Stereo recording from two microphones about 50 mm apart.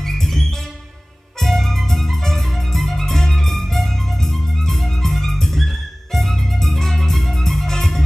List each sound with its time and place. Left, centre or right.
0.0 s music: centre